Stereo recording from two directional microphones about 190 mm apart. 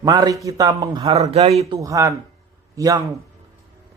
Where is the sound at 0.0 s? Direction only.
20° right (ahead or behind).